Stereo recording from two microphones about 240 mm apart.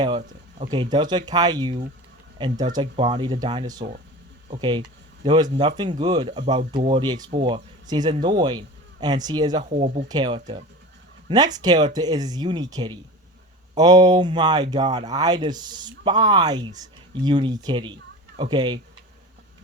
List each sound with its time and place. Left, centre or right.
0.6 s speech: centre